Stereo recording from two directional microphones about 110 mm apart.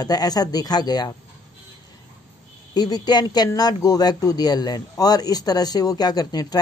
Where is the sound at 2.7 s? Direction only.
35° left (ahead or behind).